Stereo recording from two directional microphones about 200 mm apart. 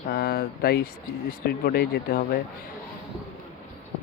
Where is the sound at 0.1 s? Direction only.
50° left (ahead or behind).